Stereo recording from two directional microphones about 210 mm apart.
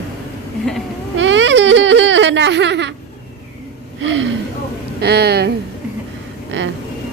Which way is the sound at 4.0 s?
65° right (ahead or behind).